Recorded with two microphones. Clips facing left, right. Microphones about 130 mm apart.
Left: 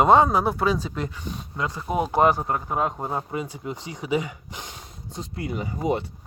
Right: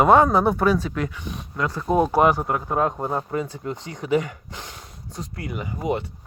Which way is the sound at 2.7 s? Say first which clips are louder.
Right 5 dB; 5° left (ahead or behind).